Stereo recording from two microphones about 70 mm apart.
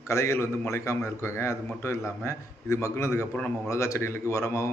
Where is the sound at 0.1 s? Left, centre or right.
Left.